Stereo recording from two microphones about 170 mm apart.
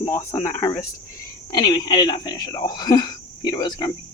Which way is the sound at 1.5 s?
25° left (ahead or behind).